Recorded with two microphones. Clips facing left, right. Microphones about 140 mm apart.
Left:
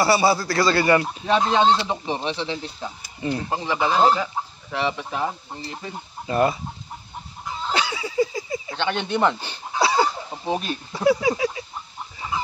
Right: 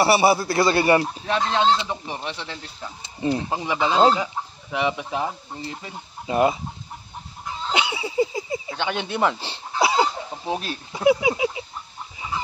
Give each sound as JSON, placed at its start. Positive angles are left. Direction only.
{"t": 0.0, "sound": "a man's voice", "side_deg": -25}
{"t": 1.3, "sound": "speech", "side_deg": 10}
{"t": 1.9, "sound": "speech", "side_deg": 25}
{"t": 3.0, "sound": "speech", "side_deg": -25}
{"t": 6.2, "sound": "speech", "side_deg": -15}
{"t": 7.7, "sound": "a sound", "side_deg": -20}
{"t": 8.6, "sound": "speech", "side_deg": -10}
{"t": 9.4, "sound": "a sound", "side_deg": -25}
{"t": 10.4, "sound": "speech", "side_deg": 0}
{"t": 10.9, "sound": "speech", "side_deg": -15}